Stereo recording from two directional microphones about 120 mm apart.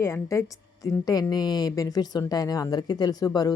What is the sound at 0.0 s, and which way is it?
A woman's voice, 25° left (ahead or behind).